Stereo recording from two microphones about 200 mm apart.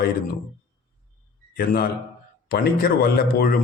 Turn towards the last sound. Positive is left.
turn(degrees=50)  # may be behind; listen again after turning